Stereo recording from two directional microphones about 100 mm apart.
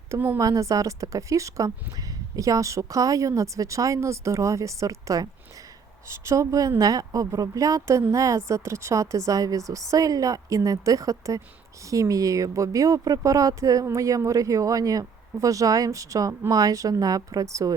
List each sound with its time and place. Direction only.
0.1 s a woman's voice: 25° right (ahead or behind)